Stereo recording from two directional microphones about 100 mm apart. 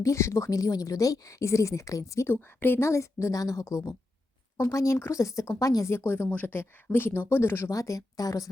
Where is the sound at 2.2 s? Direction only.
20° left (ahead or behind).